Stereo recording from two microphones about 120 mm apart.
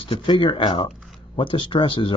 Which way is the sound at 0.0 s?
45° left (ahead or behind).